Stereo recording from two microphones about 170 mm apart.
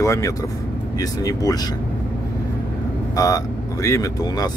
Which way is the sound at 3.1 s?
20° left (ahead or behind).